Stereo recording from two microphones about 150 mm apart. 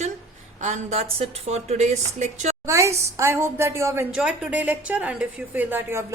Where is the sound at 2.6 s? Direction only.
20° right (ahead or behind).